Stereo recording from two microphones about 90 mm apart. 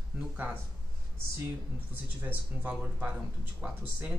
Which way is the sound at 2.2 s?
15° right (ahead or behind).